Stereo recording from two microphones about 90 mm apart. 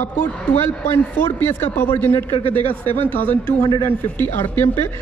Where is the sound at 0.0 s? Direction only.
25° left (ahead or behind).